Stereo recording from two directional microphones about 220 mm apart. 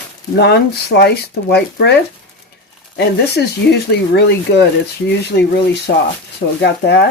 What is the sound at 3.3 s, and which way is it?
Speech, 50° left (ahead or behind).